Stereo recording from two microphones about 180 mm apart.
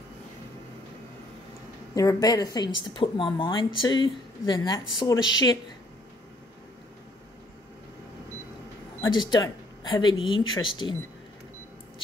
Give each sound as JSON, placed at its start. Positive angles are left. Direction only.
{"t": 2.0, "sound": "a woman's voice", "side_deg": 20}
{"t": 9.0, "sound": "a woman's voice", "side_deg": 25}